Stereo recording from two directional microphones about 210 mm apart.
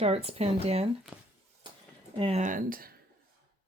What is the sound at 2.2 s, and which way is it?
Speech, 30° right (ahead or behind).